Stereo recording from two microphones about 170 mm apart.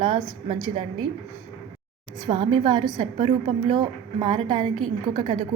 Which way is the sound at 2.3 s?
30° right (ahead or behind).